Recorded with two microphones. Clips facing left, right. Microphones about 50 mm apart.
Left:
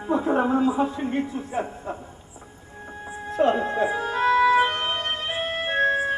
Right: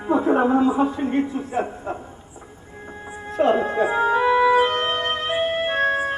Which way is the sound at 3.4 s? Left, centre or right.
Centre.